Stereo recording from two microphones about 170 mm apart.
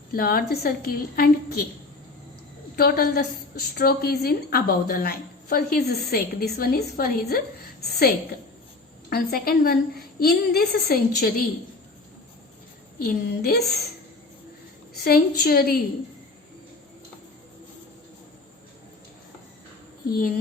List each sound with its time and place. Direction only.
0.1 s a woman's voice: 60° left (ahead or behind)
2.7 s a woman's voice: 65° left (ahead or behind)
13.0 s a woman's voice: 65° left (ahead or behind)
15.0 s a woman's voice: 65° left (ahead or behind)
20.1 s a woman's voice: 60° left (ahead or behind)